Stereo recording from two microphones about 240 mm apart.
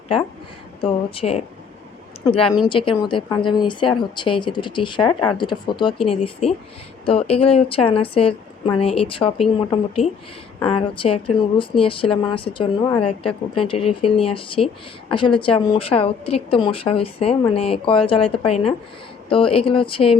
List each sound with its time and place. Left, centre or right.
0.8 s a woman's voice: left